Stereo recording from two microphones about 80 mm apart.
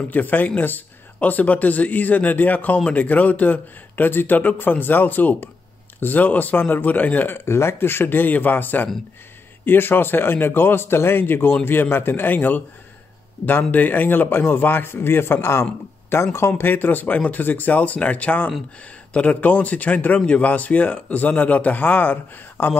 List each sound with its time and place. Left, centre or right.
0.1 s speech: left